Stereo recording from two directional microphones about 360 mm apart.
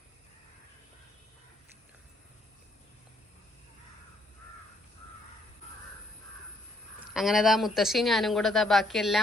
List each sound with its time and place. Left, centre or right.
7.1 s speech: centre